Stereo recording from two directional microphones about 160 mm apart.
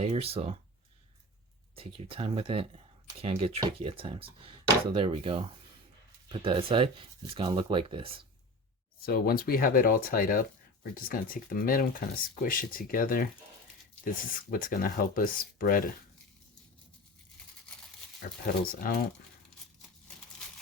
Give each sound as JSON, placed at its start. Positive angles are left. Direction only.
{"t": 0.0, "sound": "speech", "side_deg": -40}
{"t": 1.7, "sound": "speech", "side_deg": -35}
{"t": 9.0, "sound": "speech", "side_deg": 70}
{"t": 18.2, "sound": "speech", "side_deg": 60}